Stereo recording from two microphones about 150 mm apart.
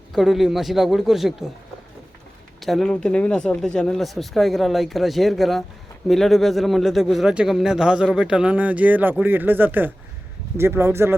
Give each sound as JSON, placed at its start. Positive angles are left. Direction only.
{"t": 0.1, "sound": "speech", "side_deg": 0}
{"t": 2.6, "sound": "speech", "side_deg": 0}